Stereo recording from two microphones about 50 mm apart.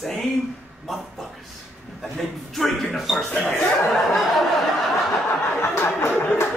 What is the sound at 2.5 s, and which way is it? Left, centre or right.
Speech, centre.